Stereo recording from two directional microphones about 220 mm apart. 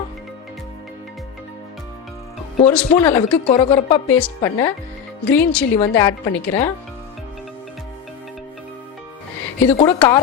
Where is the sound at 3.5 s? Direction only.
25° left (ahead or behind).